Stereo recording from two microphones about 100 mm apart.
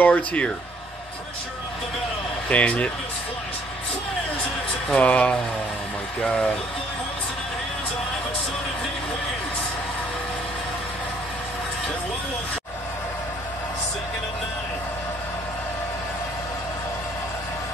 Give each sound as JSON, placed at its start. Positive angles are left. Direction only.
{"t": 0.0, "sound": "speech", "side_deg": 15}
{"t": 2.5, "sound": "speech", "side_deg": 15}
{"t": 4.8, "sound": "speech", "side_deg": 10}